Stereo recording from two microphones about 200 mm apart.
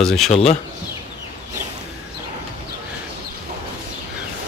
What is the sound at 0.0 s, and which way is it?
Speech, centre (ahead or behind).